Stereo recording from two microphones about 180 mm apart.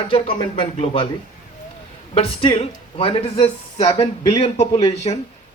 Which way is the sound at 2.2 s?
30° left (ahead or behind).